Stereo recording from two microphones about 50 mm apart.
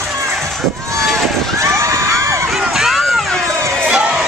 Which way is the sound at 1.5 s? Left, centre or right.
Right.